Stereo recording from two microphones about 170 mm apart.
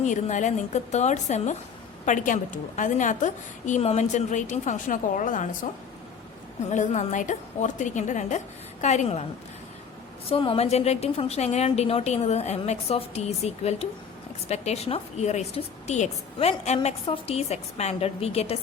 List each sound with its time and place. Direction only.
0.0 s a woman's voice: 45° left (ahead or behind)
6.7 s a woman's voice: 40° left (ahead or behind)
10.2 s a woman's voice: 30° left (ahead or behind)